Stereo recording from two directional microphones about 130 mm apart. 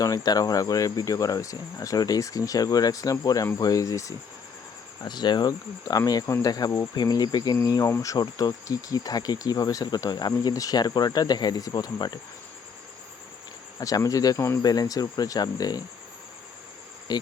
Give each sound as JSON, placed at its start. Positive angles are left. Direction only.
{"t": 0.0, "sound": "speech", "side_deg": 30}
{"t": 13.7, "sound": "speech", "side_deg": 25}
{"t": 17.1, "sound": "insect", "side_deg": 30}